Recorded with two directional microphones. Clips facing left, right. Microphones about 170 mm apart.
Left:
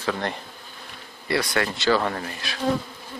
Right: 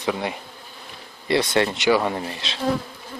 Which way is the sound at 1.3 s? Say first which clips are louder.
Right 4 dB; 25° right (ahead or behind).